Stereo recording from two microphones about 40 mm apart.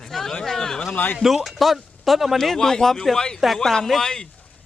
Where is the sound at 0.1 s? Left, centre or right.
Centre.